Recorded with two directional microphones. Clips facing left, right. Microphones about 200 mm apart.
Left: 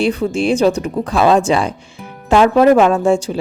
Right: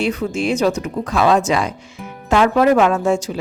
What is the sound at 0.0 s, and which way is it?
Speech, 30° left (ahead or behind).